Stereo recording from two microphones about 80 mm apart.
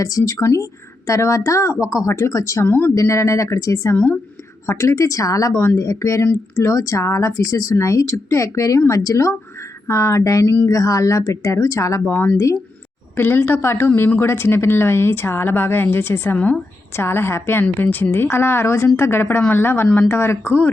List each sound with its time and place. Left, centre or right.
0.0 s a woman's voice: left
2.6 s speech: left
2.9 s a woman's voice: left
12.1 s speech: left